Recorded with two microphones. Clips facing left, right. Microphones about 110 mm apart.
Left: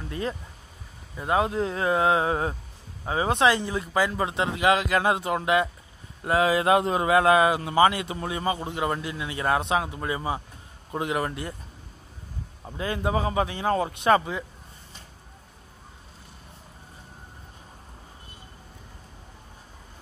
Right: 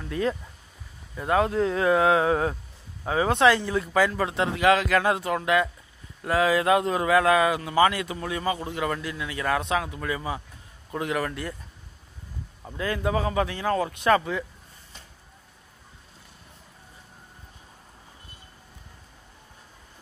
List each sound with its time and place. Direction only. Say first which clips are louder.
0.1 s speech: right 5 dB; 5° left (ahead or behind); by 11.5 s 20° left (ahead or behind)
12.6 s speech: right 1 dB; 20° left (ahead or behind)